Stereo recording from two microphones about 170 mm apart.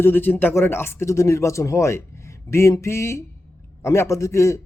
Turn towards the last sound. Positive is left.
turn(degrees=15)  # may be behind; listen again after turning